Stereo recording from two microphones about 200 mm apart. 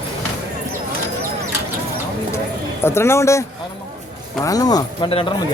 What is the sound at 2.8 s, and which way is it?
Speech, 10° left (ahead or behind).